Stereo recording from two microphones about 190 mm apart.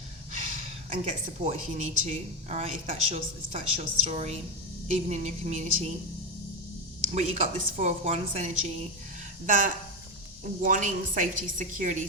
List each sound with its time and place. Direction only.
0.9 s a woman's voice: 40° right (ahead or behind)
7.1 s a woman's voice: 35° right (ahead or behind)